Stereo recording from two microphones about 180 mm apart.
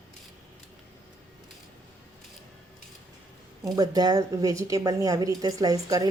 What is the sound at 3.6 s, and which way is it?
A woman's voice, 20° right (ahead or behind).